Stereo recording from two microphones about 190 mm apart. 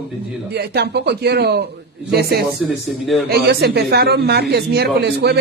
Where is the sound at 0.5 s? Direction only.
60° right (ahead or behind).